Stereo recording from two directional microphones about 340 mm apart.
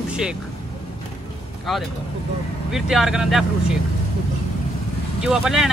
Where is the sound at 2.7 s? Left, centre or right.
Centre.